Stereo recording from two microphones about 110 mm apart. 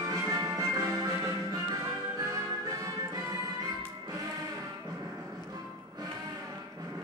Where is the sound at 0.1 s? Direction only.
25° right (ahead or behind).